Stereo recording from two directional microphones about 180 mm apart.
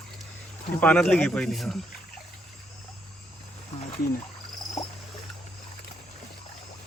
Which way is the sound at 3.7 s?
45° left (ahead or behind).